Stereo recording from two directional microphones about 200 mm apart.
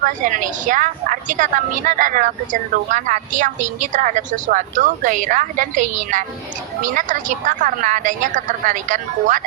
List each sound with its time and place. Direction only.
0.0 s a woman's voice: 40° right (ahead or behind)